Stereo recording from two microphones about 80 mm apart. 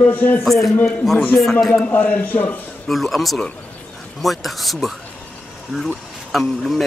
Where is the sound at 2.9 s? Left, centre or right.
Centre.